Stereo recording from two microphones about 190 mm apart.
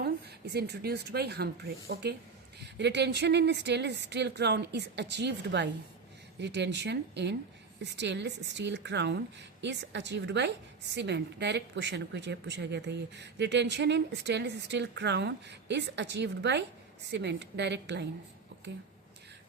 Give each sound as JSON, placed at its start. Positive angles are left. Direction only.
{"t": 0.5, "sound": "a woman's voice", "side_deg": -60}